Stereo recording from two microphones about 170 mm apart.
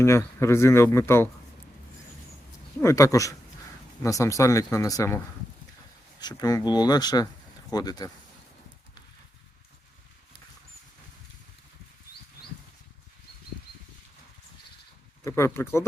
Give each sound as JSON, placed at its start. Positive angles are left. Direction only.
{"t": 0.0, "sound": "speech", "side_deg": 15}
{"t": 2.8, "sound": "speech", "side_deg": 20}
{"t": 15.2, "sound": "speech", "side_deg": 15}